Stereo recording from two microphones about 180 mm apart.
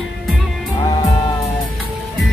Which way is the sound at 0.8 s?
25° left (ahead or behind).